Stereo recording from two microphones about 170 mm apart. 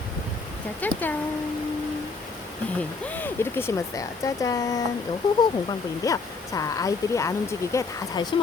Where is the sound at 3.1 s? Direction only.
10° left (ahead or behind).